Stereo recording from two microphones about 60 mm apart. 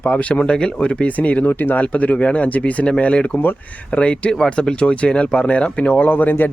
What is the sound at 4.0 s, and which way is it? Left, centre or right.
Speech, centre.